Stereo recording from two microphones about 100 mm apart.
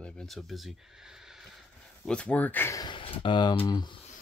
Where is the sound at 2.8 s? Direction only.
60° left (ahead or behind); by 3.9 s 45° left (ahead or behind).